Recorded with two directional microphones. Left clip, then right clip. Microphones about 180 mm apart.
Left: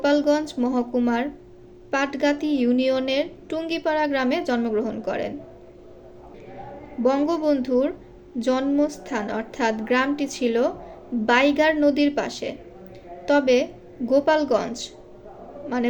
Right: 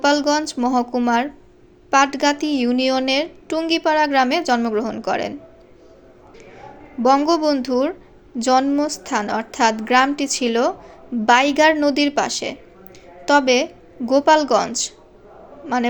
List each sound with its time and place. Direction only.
0.0 s a woman's voice: 35° right (ahead or behind)
7.0 s a woman's voice: 35° right (ahead or behind)